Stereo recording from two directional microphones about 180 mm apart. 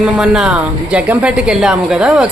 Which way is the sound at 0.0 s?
5° right (ahead or behind).